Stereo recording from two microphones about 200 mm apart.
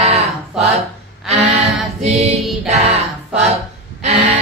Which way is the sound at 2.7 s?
30° right (ahead or behind).